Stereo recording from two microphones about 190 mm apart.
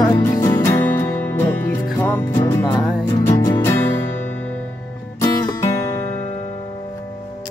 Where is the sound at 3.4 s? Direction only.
20° left (ahead or behind).